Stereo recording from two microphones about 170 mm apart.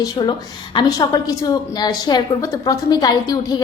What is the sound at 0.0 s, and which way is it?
A woman's voice, 25° left (ahead or behind).